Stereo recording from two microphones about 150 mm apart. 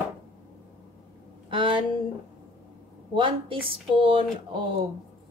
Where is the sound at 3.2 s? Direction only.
35° right (ahead or behind).